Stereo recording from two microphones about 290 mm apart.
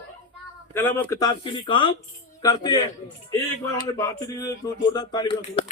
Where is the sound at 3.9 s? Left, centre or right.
Centre.